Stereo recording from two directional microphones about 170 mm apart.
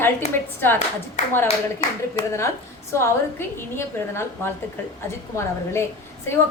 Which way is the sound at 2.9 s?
15° left (ahead or behind).